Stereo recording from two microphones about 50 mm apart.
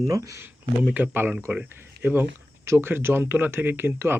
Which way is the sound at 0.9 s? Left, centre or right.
Right.